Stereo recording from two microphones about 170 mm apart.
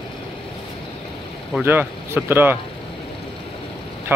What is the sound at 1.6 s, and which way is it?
Speech, 15° right (ahead or behind).